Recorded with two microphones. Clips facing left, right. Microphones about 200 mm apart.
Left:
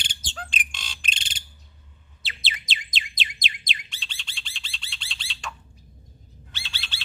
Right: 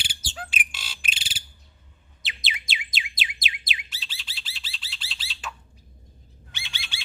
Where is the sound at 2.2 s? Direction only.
15° right (ahead or behind).